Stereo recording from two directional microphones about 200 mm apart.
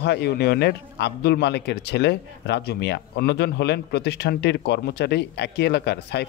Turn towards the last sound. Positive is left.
turn(degrees=55)  # may be behind; listen again after turning